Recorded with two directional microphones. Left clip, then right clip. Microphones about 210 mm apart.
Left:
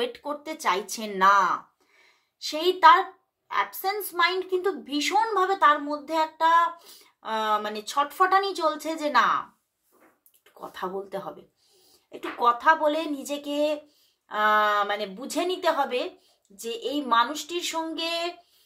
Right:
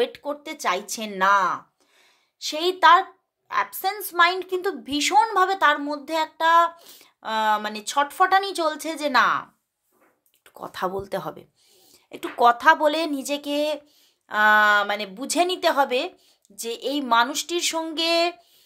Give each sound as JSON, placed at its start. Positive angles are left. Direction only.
{"t": 0.0, "sound": "a woman's voice", "side_deg": -30}
{"t": 10.6, "sound": "speech", "side_deg": -50}